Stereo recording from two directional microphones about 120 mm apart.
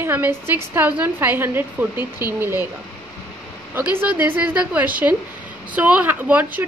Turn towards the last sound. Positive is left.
turn(degrees=-15)  # may be behind; listen again after turning